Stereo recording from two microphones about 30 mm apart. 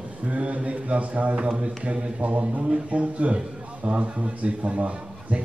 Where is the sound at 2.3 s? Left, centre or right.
Right.